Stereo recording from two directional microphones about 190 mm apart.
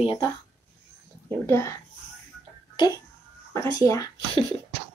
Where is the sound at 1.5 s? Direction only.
15° left (ahead or behind).